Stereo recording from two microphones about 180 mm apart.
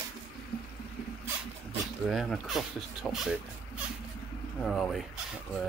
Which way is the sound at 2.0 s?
Centre (ahead or behind).